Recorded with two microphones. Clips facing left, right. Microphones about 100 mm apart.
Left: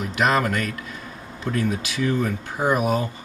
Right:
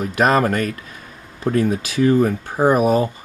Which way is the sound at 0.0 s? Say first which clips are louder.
Right 5 dB; 40° right (ahead or behind).